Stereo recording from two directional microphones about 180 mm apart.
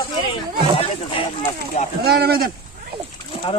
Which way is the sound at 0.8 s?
30° left (ahead or behind).